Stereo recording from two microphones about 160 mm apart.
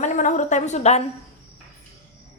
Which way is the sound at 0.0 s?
50° left (ahead or behind).